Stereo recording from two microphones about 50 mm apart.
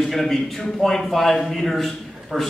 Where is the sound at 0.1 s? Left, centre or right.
Centre.